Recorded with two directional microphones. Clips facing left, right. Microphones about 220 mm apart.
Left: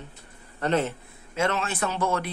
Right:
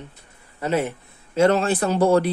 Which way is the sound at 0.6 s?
10° right (ahead or behind).